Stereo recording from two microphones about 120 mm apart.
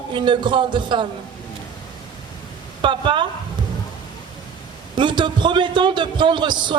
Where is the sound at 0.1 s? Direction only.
40° right (ahead or behind).